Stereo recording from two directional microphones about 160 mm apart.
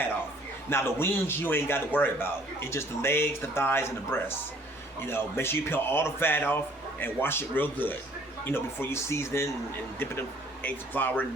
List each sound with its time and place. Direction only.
0.7 s a man's voice: 15° left (ahead or behind)